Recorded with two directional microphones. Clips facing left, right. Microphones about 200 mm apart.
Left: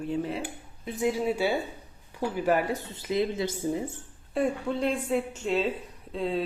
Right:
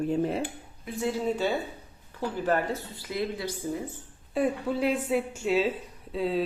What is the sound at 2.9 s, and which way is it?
Speech, 20° left (ahead or behind).